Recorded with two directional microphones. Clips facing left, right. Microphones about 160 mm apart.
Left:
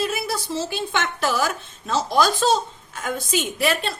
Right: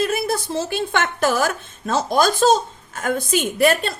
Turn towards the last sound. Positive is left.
turn(degrees=-45)  # may be behind; listen again after turning